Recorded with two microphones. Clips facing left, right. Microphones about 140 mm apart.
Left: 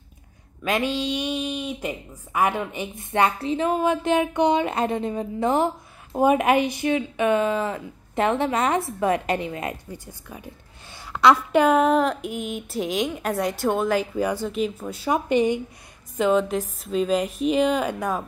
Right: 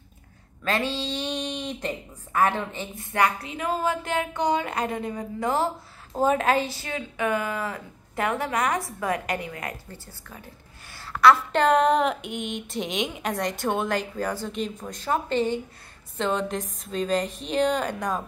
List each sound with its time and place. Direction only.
0.7 s a woman's voice: 15° left (ahead or behind)
3.0 s a woman's voice: 25° left (ahead or behind)
11.5 s a woman's voice: 5° left (ahead or behind)